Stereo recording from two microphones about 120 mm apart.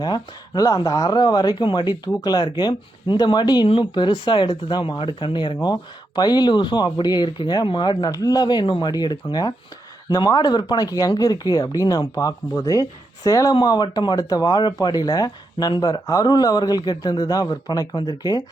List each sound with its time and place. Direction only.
0.0 s speech: 35° left (ahead or behind)